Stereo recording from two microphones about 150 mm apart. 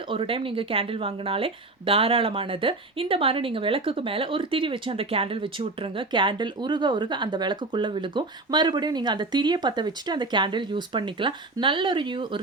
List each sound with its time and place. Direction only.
0.1 s speech: 35° right (ahead or behind)